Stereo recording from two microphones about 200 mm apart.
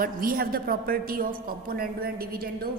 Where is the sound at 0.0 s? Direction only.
45° right (ahead or behind).